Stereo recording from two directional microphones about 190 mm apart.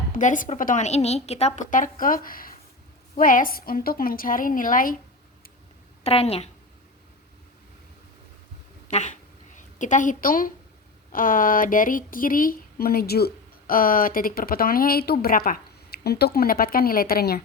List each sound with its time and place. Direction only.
0.1 s speech: 45° left (ahead or behind)
6.0 s a woman's voice: 35° left (ahead or behind)
8.9 s a woman's voice: 35° left (ahead or behind); by 17.4 s 55° left (ahead or behind)